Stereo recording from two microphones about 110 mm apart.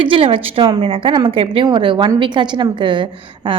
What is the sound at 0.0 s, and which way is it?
A woman's voice, 55° right (ahead or behind).